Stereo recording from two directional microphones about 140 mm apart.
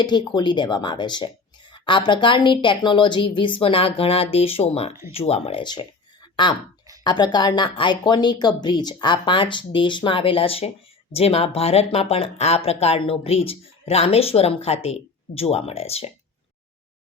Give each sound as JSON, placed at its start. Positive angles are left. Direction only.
{"t": 0.3, "sound": "a woman's voice", "side_deg": 30}
{"t": 5.6, "sound": "a woman's voice", "side_deg": 30}